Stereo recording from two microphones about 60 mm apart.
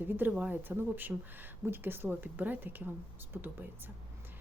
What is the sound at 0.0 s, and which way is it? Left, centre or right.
A woman's voice, right.